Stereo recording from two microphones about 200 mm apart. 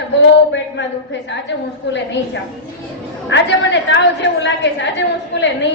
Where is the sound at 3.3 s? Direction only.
65° left (ahead or behind).